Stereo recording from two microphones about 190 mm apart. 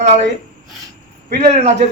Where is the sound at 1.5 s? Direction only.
35° right (ahead or behind).